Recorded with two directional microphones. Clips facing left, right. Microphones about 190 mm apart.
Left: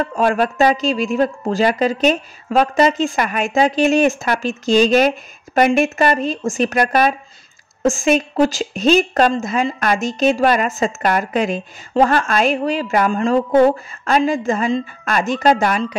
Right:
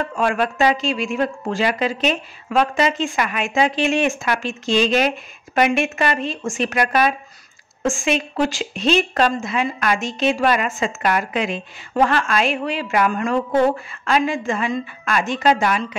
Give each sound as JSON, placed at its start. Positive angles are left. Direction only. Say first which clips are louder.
{"t": 0.0, "sound": "a woman's voice", "louder": "left 3 dB", "side_deg": 40}